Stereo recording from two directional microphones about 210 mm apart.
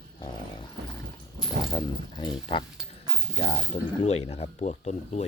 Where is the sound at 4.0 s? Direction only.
30° left (ahead or behind).